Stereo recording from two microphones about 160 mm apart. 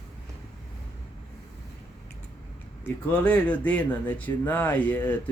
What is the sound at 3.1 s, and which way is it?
Speech, 5° left (ahead or behind).